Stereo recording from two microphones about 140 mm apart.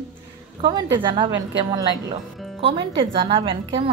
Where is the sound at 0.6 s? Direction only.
35° right (ahead or behind).